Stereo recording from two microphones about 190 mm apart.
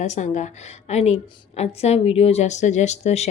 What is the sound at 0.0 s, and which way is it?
A woman's voice, 40° left (ahead or behind).